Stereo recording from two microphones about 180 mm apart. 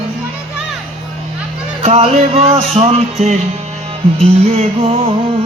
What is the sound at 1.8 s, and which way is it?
Music, 35° right (ahead or behind).